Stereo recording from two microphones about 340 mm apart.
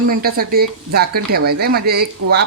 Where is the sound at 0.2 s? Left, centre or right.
Right.